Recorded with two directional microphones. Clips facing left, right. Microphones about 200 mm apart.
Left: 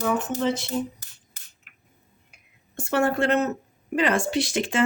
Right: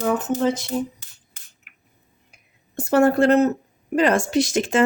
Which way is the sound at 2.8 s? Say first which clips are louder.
Right 6 dB; 40° right (ahead or behind).